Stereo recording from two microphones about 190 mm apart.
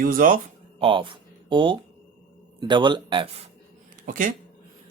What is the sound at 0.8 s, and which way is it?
Speech, 25° right (ahead or behind).